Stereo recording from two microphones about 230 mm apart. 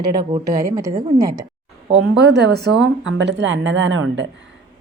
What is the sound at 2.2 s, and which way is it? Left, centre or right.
A woman's voice, right.